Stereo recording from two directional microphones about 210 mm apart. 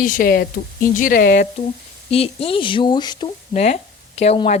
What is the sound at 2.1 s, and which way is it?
Speech, 30° left (ahead or behind).